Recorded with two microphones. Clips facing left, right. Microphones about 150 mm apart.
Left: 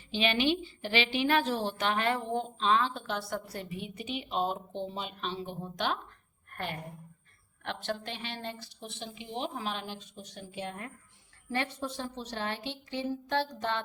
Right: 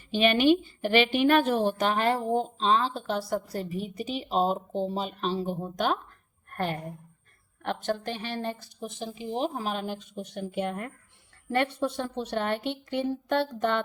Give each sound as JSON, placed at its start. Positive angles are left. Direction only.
{"t": 0.1, "sound": "a woman's voice", "side_deg": -50}
{"t": 1.9, "sound": "a woman's voice", "side_deg": -35}
{"t": 6.5, "sound": "a sound", "side_deg": -40}
{"t": 7.6, "sound": "a woman's voice", "side_deg": -45}